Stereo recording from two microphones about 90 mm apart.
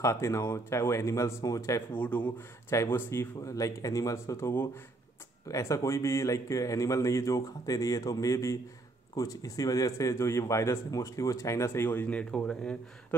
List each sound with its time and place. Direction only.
0.0 s speech: 35° left (ahead or behind)
2.0 s speech: 15° left (ahead or behind)
2.7 s speech: 30° left (ahead or behind); by 12.7 s 10° left (ahead or behind)